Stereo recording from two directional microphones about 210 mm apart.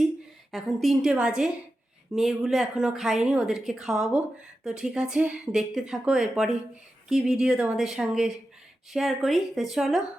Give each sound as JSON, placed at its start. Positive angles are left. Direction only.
{"t": 0.5, "sound": "speech", "side_deg": 0}